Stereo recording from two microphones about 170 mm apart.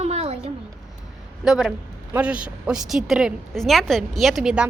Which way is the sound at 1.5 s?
Centre (ahead or behind).